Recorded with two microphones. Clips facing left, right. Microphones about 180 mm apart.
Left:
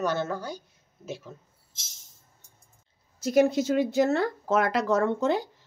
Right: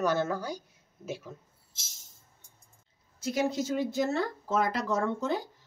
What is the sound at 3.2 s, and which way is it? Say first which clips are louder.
Speech: left 7 dB; 55° left (ahead or behind).